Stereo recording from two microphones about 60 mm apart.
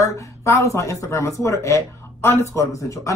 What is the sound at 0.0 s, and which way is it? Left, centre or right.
A man's voice, left.